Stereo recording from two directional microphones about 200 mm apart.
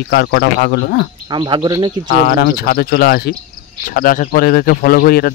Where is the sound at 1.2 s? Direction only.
25° right (ahead or behind).